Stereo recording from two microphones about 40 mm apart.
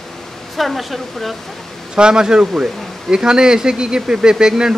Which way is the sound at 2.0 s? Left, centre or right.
Centre.